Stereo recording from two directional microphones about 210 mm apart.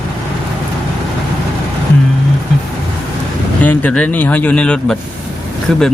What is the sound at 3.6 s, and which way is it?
Speech, 5° left (ahead or behind).